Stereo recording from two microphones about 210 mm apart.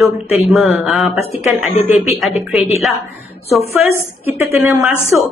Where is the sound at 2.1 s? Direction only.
10° right (ahead or behind).